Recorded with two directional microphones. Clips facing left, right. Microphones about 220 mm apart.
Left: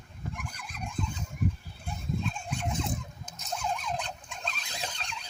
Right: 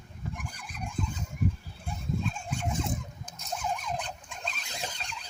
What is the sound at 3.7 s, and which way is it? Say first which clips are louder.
Fowl: even; 10° right (ahead or behind).